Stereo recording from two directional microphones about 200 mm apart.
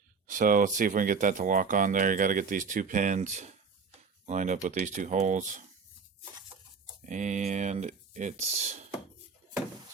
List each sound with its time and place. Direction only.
0.3 s speech: 40° right (ahead or behind)
7.0 s speech: 40° right (ahead or behind)